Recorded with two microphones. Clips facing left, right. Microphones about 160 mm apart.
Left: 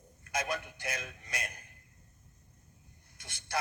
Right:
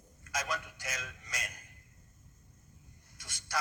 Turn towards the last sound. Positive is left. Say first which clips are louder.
# left 1 dB
turn(degrees=60)  # may be behind; listen again after turning